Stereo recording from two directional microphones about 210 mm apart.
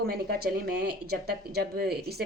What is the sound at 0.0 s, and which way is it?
Speech, 45° right (ahead or behind).